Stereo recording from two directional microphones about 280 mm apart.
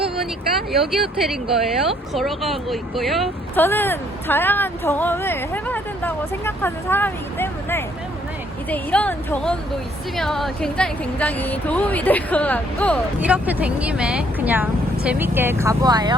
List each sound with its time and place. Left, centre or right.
0.8 s speech: centre